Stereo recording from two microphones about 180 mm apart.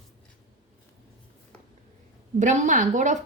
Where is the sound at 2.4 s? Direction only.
45° right (ahead or behind).